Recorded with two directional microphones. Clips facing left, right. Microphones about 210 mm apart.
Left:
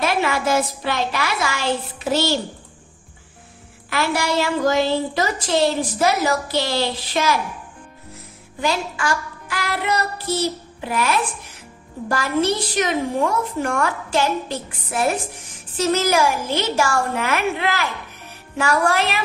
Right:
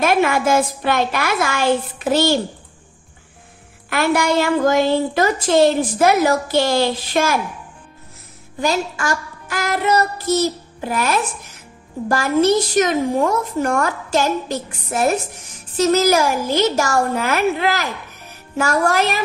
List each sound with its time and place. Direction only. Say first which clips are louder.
0.0 s a woman's voice: right 4 dB; 50° right (ahead or behind)
3.9 s a woman's voice: right 4 dB; 55° right (ahead or behind)
8.5 s child singing: right 3 dB; 40° right (ahead or behind)
12.1 s a woman's voice: right 5 dB; 45° right (ahead or behind)